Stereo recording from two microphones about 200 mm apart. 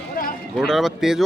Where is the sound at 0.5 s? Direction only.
Centre (ahead or behind).